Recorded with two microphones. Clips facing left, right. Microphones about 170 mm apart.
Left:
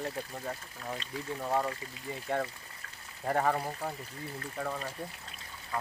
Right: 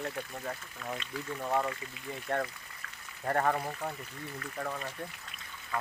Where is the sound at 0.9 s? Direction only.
30° left (ahead or behind).